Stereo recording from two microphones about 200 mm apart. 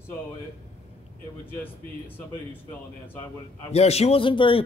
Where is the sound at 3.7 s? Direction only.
30° left (ahead or behind).